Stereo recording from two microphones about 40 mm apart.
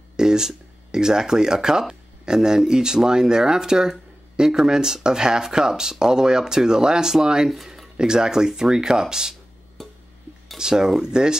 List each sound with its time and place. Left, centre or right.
0.1 s speech: centre
8.0 s speech: centre
9.8 s a sound: centre
10.6 s speech: centre